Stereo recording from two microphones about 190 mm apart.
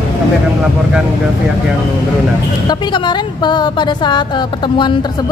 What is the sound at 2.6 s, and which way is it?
Speech, 25° left (ahead or behind).